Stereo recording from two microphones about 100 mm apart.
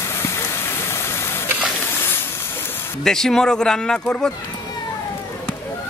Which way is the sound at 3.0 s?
5° left (ahead or behind).